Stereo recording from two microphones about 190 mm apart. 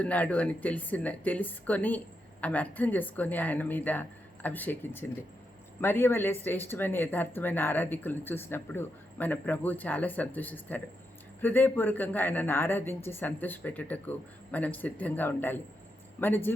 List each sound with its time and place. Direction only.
0.0 s speech: 5° left (ahead or behind)